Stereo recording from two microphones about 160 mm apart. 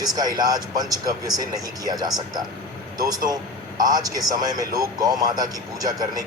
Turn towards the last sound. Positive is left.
turn(degrees=-25)  # may be behind; listen again after turning